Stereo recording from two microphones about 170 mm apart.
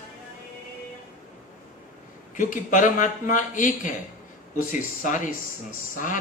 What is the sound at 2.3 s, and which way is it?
Speech, 50° left (ahead or behind).